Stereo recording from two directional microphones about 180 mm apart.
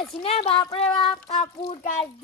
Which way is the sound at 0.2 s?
35° left (ahead or behind).